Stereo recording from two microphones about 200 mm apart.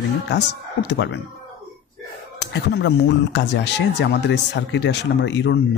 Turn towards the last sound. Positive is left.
turn(degrees=60)  # may be behind; listen again after turning